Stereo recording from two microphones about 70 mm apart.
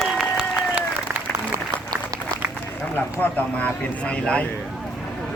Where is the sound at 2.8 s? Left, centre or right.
Left.